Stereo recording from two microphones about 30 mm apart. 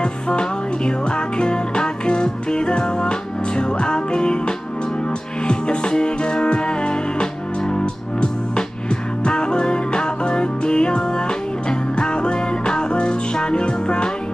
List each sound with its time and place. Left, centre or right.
0.0 s music: left